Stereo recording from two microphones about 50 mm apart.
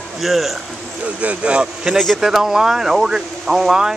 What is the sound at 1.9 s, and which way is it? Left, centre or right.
Speech, centre.